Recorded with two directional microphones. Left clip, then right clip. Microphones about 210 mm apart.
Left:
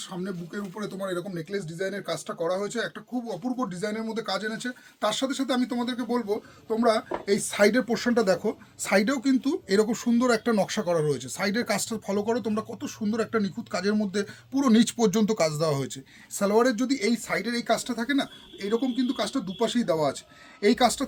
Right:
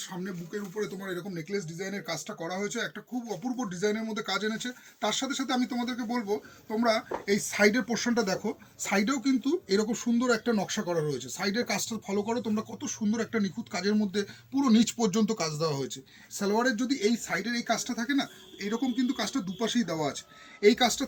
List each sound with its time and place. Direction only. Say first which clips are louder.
0.8 s speech: left 4 dB; 25° left (ahead or behind); by 21.1 s 45° left (ahead or behind)